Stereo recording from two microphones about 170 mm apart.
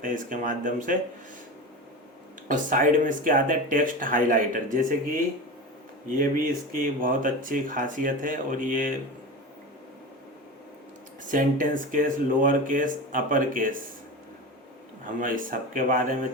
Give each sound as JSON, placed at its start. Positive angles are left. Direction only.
{"t": 0.0, "sound": "speech", "side_deg": -50}
{"t": 2.5, "sound": "speech", "side_deg": -50}
{"t": 6.1, "sound": "speech", "side_deg": -55}
{"t": 11.3, "sound": "speech", "side_deg": -50}
{"t": 15.0, "sound": "speech", "side_deg": -55}